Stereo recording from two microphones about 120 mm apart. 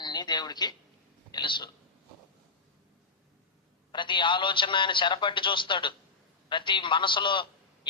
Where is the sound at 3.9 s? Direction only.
40° left (ahead or behind).